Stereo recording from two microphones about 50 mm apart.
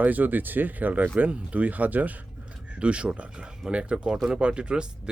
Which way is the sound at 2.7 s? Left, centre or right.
Right.